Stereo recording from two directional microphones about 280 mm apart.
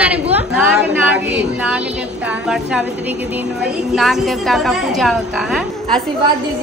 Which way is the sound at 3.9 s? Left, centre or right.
Centre.